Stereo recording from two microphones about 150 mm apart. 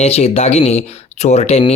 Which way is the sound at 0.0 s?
45° left (ahead or behind).